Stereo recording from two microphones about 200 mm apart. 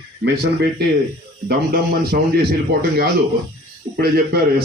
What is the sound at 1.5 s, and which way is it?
A man's voice, 50° right (ahead or behind).